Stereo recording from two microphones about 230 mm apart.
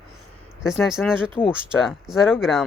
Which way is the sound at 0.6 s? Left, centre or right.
Centre.